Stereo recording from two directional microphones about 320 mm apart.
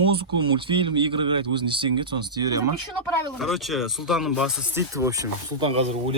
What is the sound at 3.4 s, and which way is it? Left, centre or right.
Speech, centre.